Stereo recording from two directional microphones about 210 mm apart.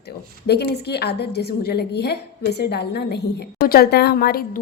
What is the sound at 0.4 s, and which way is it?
A woman's voice, 50° left (ahead or behind).